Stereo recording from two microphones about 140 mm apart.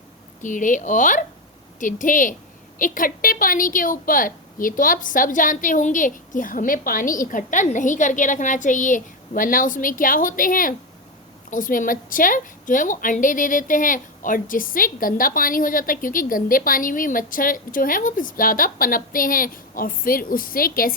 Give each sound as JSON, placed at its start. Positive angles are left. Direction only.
{"t": 0.4, "sound": "a woman's voice", "side_deg": 65}